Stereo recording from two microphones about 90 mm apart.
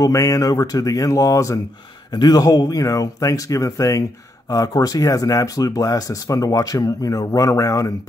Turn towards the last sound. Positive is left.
turn(degrees=40)  # may be behind; listen again after turning